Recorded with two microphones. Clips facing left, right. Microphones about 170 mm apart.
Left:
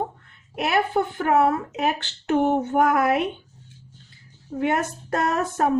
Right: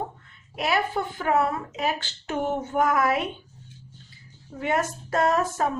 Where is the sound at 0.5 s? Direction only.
55° left (ahead or behind).